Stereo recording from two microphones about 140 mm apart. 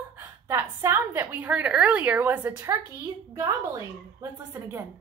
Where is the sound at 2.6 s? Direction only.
25° right (ahead or behind).